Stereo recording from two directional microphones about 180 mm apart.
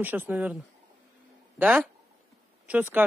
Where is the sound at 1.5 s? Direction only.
10° right (ahead or behind).